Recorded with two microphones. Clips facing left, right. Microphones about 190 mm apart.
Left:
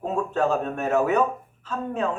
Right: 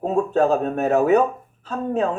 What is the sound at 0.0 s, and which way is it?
Speech, 35° right (ahead or behind).